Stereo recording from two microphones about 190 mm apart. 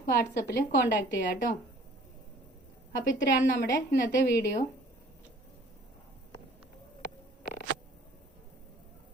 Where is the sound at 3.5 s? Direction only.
65° left (ahead or behind).